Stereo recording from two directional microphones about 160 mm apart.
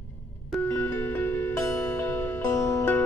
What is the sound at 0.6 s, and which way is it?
Music, 15° left (ahead or behind).